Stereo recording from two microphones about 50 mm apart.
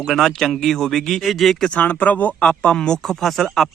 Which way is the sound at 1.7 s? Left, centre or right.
Left.